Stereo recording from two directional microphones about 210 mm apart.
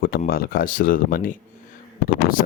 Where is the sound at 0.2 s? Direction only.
45° left (ahead or behind).